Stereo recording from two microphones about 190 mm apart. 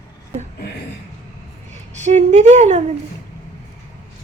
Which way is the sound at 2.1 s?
35° right (ahead or behind).